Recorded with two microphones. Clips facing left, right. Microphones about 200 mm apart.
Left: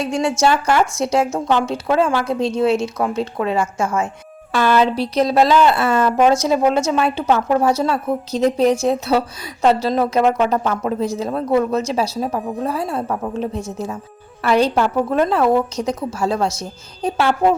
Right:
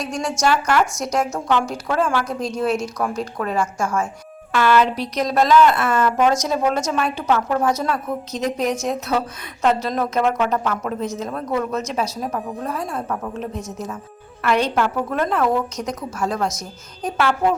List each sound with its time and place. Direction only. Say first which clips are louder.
0.0 s a woman's voice: left 4 dB; 25° left (ahead or behind)